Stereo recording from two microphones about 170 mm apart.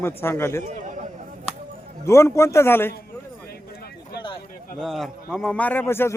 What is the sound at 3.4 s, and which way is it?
Clip-clop, 65° left (ahead or behind).